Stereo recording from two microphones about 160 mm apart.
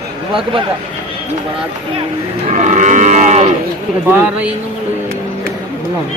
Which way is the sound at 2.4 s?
50° right (ahead or behind).